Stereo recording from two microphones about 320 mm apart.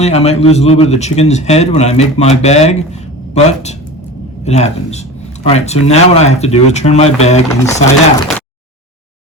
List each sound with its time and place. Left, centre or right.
0.0 s speech: centre